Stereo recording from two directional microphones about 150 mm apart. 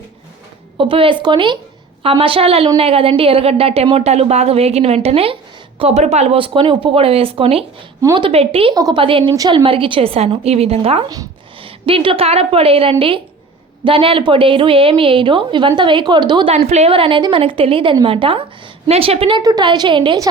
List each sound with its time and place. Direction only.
0.8 s a woman's voice: 35° right (ahead or behind)
8.7 s a woman's voice: 30° right (ahead or behind)
9.3 s a woman's voice: 20° right (ahead or behind)
9.6 s a woman's voice: 35° right (ahead or behind)
19.4 s a woman's voice: 25° right (ahead or behind)